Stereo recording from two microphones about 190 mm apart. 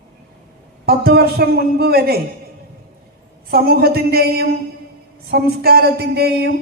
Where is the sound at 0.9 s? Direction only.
55° right (ahead or behind).